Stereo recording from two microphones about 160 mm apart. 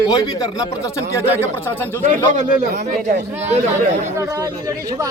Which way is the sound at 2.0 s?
50° right (ahead or behind).